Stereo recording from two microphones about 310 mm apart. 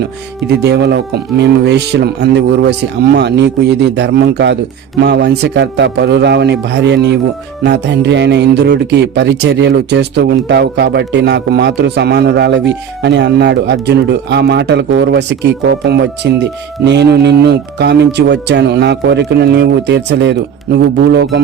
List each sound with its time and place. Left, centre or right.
0.0 s speech: right